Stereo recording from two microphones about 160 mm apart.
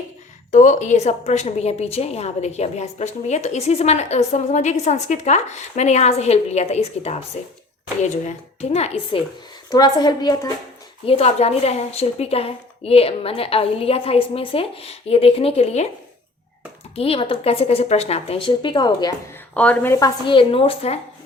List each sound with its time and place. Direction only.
0.5 s a woman's voice: 50° left (ahead or behind)
9.6 s a woman's voice: 25° left (ahead or behind)
11.0 s a woman's voice: 40° left (ahead or behind)
16.9 s a woman's voice: 35° left (ahead or behind)
19.5 s speech: 10° left (ahead or behind)
20.2 s a woman's voice: 30° left (ahead or behind)